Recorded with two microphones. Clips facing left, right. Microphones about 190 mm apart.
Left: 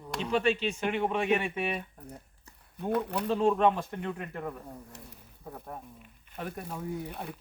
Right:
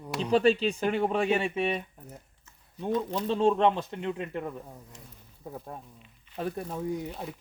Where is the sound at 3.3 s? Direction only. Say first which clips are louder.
Right 1 dB; 25° right (ahead or behind).